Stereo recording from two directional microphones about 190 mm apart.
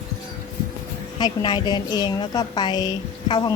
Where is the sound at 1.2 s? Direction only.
20° left (ahead or behind).